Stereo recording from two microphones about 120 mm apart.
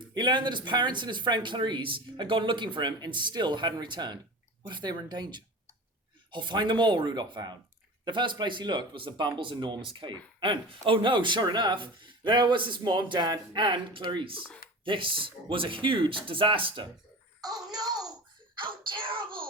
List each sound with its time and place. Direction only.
0.1 s speech: 40° right (ahead or behind)
17.4 s a child's voice: 30° right (ahead or behind)
18.6 s speech: 45° right (ahead or behind)